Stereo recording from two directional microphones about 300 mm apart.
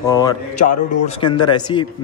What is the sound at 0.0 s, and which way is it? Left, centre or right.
A man's voice, centre.